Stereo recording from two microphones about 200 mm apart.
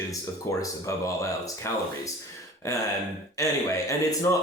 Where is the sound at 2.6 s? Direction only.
15° left (ahead or behind).